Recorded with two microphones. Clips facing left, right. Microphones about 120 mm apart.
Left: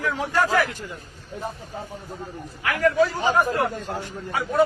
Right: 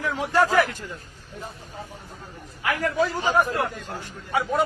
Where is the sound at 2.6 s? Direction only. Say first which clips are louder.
Even; 20° right (ahead or behind).